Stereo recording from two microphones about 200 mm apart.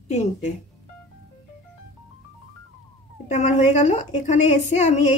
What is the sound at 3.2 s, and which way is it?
Speech, 35° left (ahead or behind).